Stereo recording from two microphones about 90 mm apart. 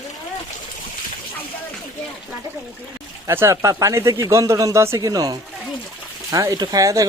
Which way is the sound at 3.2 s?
30° right (ahead or behind).